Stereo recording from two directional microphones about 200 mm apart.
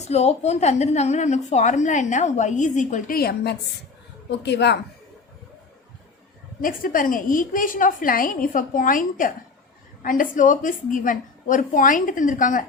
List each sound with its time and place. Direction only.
0.0 s a woman's voice: 30° left (ahead or behind); by 4.8 s 55° left (ahead or behind)
6.6 s a woman's voice: 45° left (ahead or behind)